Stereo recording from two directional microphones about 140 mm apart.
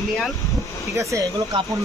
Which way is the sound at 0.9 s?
20° right (ahead or behind).